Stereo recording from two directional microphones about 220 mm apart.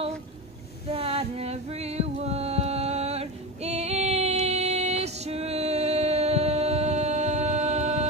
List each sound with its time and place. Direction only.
0.9 s music: 25° right (ahead or behind)